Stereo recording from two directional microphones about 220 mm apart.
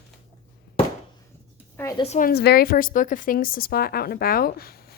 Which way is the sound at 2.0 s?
35° left (ahead or behind).